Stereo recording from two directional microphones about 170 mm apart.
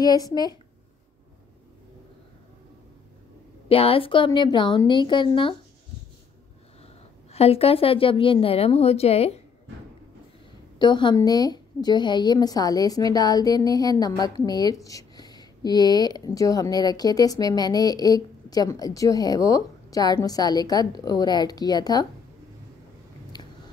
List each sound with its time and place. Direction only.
0.0 s a woman's voice: 20° left (ahead or behind)
3.6 s a woman's voice: 35° left (ahead or behind)
7.3 s a woman's voice: 35° left (ahead or behind)
10.8 s a woman's voice: 25° left (ahead or behind)